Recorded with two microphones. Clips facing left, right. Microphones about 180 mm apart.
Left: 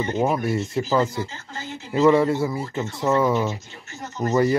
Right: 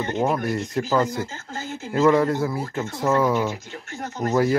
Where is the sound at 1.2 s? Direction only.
45° right (ahead or behind).